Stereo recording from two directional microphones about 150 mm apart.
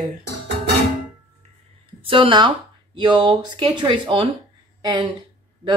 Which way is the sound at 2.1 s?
35° right (ahead or behind).